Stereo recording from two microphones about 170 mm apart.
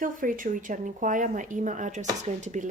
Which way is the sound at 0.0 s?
50° right (ahead or behind).